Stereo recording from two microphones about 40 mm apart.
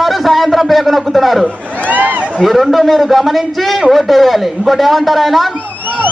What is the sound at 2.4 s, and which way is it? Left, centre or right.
A man's voice, centre.